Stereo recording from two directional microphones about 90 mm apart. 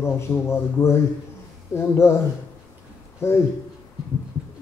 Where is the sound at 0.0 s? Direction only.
30° left (ahead or behind).